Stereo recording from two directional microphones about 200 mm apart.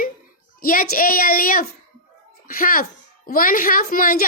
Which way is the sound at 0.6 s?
45° left (ahead or behind).